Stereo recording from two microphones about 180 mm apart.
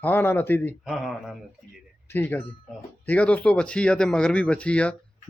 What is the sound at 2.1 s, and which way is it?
Speech, 10° left (ahead or behind).